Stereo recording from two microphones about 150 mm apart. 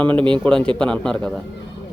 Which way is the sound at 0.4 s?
5° left (ahead or behind).